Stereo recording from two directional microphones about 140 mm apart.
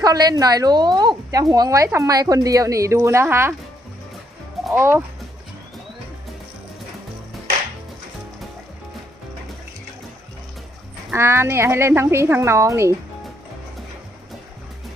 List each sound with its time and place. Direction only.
0.0 s a woman's voice: 25° right (ahead or behind)
4.6 s speech: 10° right (ahead or behind)
11.1 s a woman's voice: 15° right (ahead or behind)